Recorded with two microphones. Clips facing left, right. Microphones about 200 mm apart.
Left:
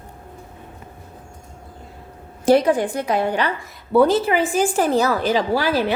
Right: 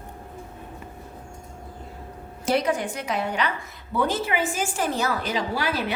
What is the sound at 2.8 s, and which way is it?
A woman's voice, 35° left (ahead or behind).